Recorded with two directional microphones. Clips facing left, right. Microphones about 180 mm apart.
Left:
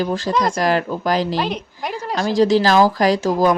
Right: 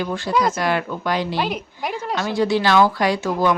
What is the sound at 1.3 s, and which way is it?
Speech, 5° right (ahead or behind).